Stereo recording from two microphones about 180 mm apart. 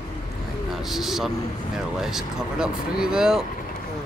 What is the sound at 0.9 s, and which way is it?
Speech, centre (ahead or behind).